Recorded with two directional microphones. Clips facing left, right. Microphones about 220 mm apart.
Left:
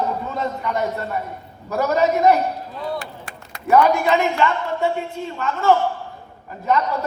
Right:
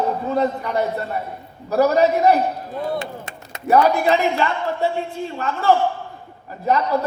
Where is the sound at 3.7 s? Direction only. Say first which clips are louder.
Even; 35° right (ahead or behind).